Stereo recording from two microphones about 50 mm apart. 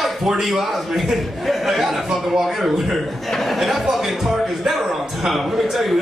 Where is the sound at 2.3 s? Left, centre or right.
Centre.